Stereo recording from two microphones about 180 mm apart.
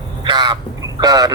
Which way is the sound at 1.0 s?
20° right (ahead or behind).